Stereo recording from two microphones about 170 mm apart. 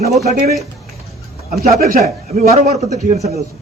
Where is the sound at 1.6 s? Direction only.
60° right (ahead or behind).